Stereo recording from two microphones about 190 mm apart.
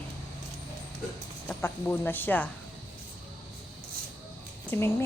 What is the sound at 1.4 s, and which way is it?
Speech, 10° left (ahead or behind).